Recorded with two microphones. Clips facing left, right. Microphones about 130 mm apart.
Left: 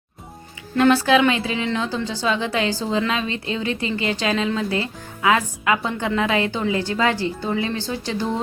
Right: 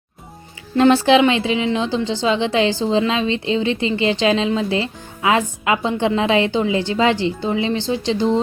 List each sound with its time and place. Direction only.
0.8 s a woman's voice: 25° right (ahead or behind)